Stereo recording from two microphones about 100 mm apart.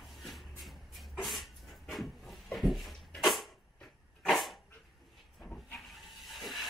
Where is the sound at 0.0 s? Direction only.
Centre (ahead or behind).